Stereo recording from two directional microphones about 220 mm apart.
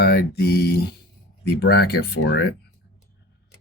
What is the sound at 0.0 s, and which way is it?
Speech, 45° left (ahead or behind).